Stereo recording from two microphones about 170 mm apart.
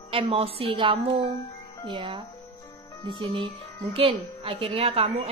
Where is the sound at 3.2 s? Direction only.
30° right (ahead or behind).